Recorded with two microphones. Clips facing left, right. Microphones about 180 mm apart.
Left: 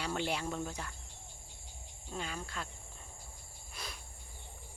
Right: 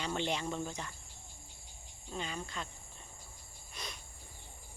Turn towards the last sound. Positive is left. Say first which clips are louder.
# even
turn(degrees=5)  # may be behind; listen again after turning